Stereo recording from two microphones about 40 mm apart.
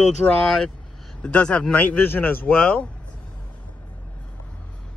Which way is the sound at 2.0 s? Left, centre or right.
Left.